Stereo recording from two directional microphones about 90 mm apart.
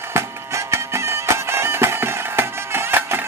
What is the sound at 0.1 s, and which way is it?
Music, 30° right (ahead or behind).